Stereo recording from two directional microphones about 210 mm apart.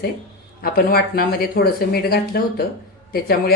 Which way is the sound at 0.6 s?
45° left (ahead or behind).